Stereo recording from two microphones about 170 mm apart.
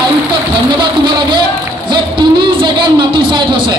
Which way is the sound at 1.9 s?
25° right (ahead or behind).